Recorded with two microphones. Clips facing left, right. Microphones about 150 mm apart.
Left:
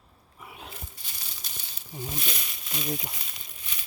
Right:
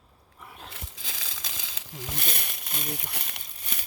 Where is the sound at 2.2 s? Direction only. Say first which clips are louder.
Right 1 dB; 50° right (ahead or behind).